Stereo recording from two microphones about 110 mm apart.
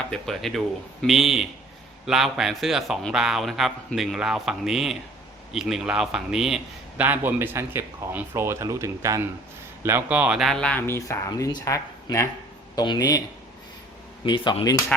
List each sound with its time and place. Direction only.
0.1 s a man's voice: 5° left (ahead or behind)
7.0 s a man's voice: 15° right (ahead or behind)
10.3 s speech: centre (ahead or behind); by 11.2 s 20° left (ahead or behind)
11.3 s speech: 35° left (ahead or behind)
12.7 s speech: 40° left (ahead or behind)
14.3 s speech: 50° left (ahead or behind)